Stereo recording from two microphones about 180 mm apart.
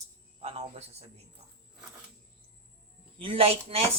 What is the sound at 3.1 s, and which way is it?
Speech, 30° right (ahead or behind).